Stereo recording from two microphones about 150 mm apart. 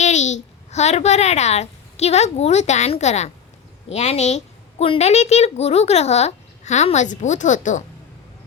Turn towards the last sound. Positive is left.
turn(degrees=55)  # may be behind; listen again after turning